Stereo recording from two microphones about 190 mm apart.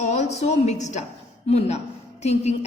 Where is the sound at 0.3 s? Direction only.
35° left (ahead or behind).